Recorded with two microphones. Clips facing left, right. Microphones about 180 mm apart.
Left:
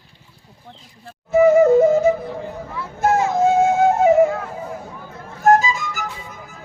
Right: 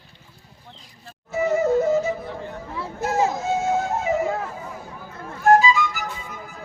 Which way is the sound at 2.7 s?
30° right (ahead or behind).